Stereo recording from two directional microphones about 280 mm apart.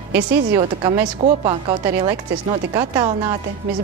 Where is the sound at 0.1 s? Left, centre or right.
Centre.